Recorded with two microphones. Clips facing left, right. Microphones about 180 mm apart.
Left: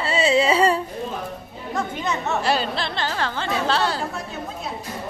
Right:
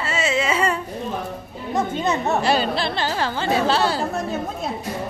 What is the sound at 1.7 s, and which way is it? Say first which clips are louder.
Speech: right 4 dB; 25° right (ahead or behind).